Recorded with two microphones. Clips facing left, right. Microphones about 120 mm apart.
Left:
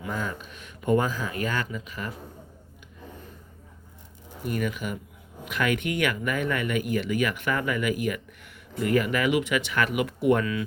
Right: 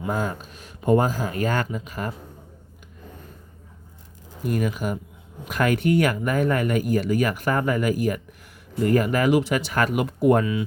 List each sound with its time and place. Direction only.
0.1 s speech: 40° right (ahead or behind)
4.5 s speech: 40° right (ahead or behind)